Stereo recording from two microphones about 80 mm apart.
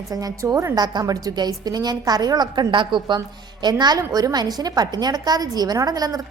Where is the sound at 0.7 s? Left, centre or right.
Right.